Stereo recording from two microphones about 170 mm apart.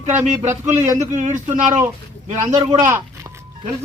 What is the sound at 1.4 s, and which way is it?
Speech, 45° right (ahead or behind).